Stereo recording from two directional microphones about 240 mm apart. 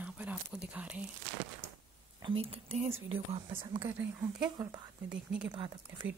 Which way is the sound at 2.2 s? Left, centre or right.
Right.